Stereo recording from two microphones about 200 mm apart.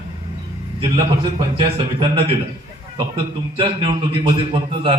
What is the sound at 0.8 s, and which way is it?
A man's voice, 25° right (ahead or behind).